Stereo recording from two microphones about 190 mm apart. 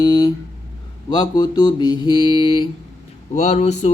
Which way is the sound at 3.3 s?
35° left (ahead or behind).